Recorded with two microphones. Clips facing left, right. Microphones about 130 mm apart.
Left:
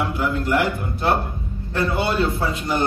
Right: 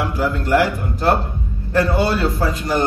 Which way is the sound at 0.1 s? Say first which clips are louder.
Right 3 dB; 35° right (ahead or behind).